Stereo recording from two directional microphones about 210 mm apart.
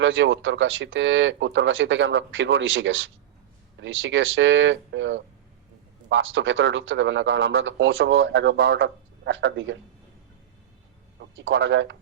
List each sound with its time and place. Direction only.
0.0 s speech: 65° right (ahead or behind)
11.2 s speech: 65° right (ahead or behind)